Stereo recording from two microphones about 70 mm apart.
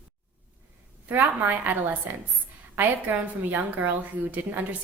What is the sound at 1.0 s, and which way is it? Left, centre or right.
A woman's voice, right.